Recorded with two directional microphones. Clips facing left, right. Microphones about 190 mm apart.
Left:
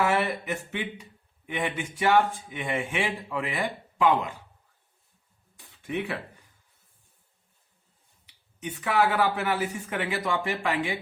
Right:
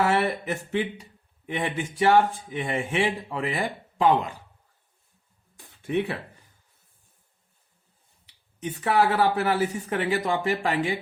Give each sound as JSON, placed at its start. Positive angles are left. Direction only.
{"t": 0.2, "sound": "speech", "side_deg": -35}
{"t": 5.5, "sound": "a sound", "side_deg": -35}
{"t": 8.6, "sound": "speech", "side_deg": -35}